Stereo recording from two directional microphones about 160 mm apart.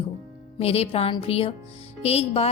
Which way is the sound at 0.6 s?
40° left (ahead or behind).